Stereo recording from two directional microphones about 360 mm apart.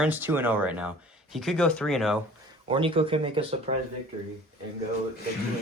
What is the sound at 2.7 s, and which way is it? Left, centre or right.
Speech, centre.